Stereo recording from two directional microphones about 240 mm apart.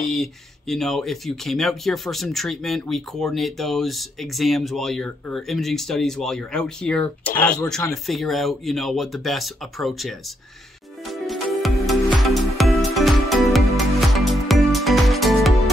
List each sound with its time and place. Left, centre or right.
0.1 s speech: centre
11.1 s music: centre